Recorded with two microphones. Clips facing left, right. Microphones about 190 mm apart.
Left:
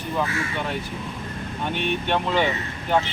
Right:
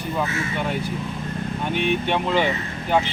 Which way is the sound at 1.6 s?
5° right (ahead or behind).